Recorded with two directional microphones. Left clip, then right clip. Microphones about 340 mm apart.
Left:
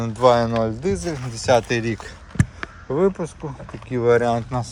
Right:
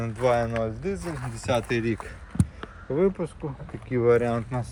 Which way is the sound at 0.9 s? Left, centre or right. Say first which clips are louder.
Left 7 dB; left.